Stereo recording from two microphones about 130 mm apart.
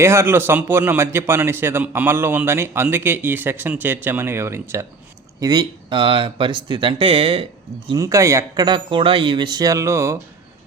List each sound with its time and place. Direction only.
0.0 s a man's voice: 20° right (ahead or behind)
5.4 s speech: 35° right (ahead or behind)
7.9 s speech: 25° right (ahead or behind)
8.6 s speech: 40° right (ahead or behind); by 10.2 s 20° right (ahead or behind)